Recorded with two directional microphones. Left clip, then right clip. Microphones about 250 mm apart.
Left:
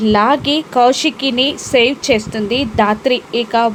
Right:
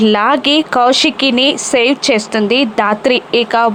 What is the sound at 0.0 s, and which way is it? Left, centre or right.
Speech, centre.